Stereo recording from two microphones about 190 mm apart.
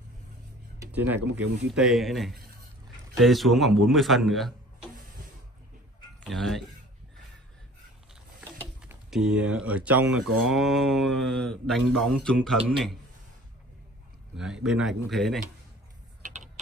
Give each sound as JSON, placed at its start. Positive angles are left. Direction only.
{"t": 0.9, "sound": "speech", "side_deg": -10}
{"t": 6.2, "sound": "speech", "side_deg": 0}
{"t": 8.8, "sound": "speech", "side_deg": 0}
{"t": 14.3, "sound": "speech", "side_deg": -5}
{"t": 16.2, "sound": "typing", "side_deg": -45}